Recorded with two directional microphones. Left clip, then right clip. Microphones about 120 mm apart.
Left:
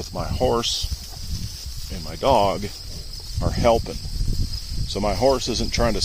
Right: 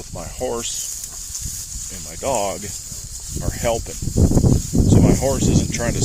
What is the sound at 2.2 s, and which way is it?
Speech, 30° left (ahead or behind).